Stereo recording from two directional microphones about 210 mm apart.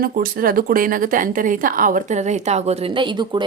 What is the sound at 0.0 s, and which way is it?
A woman's voice, 45° right (ahead or behind).